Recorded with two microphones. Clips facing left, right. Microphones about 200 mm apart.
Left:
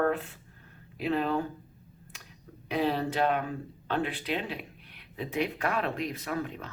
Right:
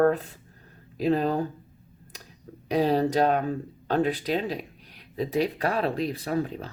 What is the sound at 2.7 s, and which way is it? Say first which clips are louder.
Speech: right 6 dB; 40° right (ahead or behind).